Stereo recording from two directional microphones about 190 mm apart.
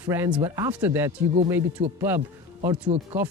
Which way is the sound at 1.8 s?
25° right (ahead or behind).